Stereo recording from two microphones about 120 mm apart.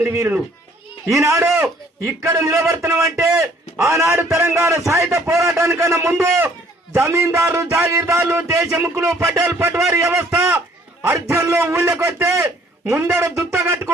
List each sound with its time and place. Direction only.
0.0 s speech: 25° right (ahead or behind)
8.6 s a man's voice: 5° right (ahead or behind)
9.2 s speech: 25° right (ahead or behind)
10.2 s a man's voice: 10° right (ahead or behind)
11.1 s speech: 20° right (ahead or behind)